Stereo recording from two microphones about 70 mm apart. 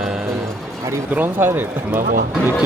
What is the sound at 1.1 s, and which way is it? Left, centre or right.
Speech, right.